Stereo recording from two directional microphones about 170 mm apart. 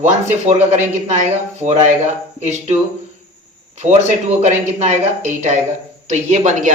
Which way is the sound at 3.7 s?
40° right (ahead or behind).